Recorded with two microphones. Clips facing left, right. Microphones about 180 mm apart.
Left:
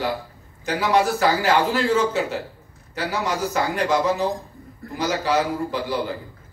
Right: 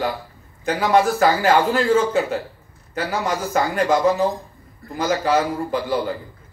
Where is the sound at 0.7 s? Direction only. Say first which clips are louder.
Right 3 dB; 50° right (ahead or behind).